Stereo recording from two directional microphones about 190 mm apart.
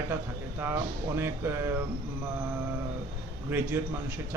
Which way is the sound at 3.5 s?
10° right (ahead or behind).